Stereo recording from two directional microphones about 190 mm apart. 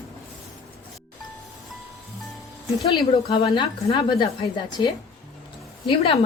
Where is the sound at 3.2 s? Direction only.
30° left (ahead or behind).